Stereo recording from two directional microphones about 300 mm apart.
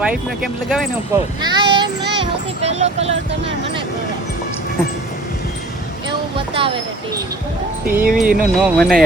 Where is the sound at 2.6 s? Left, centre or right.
Right.